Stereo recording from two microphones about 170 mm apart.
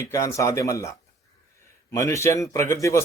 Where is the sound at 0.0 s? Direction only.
15° left (ahead or behind).